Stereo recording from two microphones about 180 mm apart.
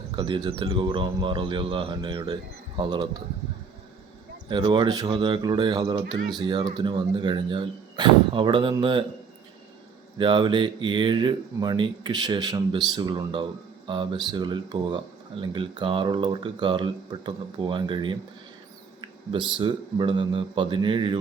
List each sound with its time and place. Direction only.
0.2 s speech: 25° right (ahead or behind)
4.4 s speech: 25° right (ahead or behind)
10.2 s speech: 25° right (ahead or behind)